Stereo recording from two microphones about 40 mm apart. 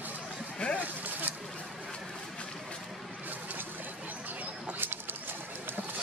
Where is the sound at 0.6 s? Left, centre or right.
Left.